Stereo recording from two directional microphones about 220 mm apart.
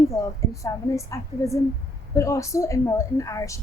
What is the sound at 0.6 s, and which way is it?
A woman's voice, 15° left (ahead or behind).